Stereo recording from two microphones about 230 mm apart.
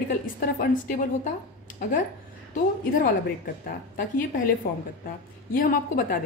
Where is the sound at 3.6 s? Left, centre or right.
Left.